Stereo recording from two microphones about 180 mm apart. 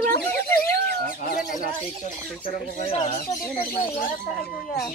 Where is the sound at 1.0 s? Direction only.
50° left (ahead or behind).